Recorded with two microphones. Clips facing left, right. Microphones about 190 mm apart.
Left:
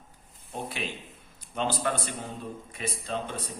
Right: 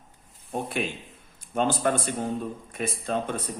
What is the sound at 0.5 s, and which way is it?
A man's voice, 50° right (ahead or behind).